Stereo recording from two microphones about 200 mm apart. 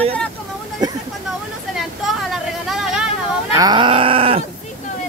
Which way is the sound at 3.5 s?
20° right (ahead or behind).